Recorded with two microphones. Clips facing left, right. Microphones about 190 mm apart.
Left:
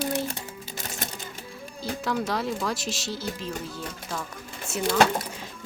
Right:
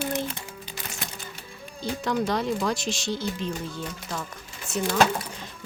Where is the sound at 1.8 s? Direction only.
5° left (ahead or behind).